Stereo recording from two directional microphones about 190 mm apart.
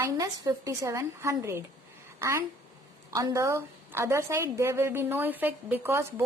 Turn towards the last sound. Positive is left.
turn(degrees=-10)  # may be behind; listen again after turning